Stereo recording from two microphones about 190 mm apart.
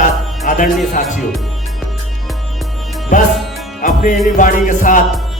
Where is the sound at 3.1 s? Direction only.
45° left (ahead or behind).